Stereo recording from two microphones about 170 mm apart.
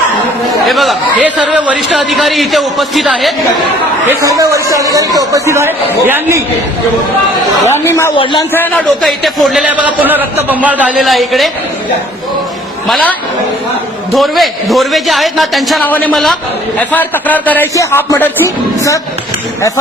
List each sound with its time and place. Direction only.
0.7 s a man's voice: centre (ahead or behind)
4.2 s a man's voice: 20° right (ahead or behind)
7.7 s a man's voice: 15° left (ahead or behind)
8.1 s a man's voice: 30° left (ahead or behind)
8.5 s a man's voice: 10° left (ahead or behind)
14.1 s a man's voice: centre (ahead or behind); by 18.5 s 15° left (ahead or behind)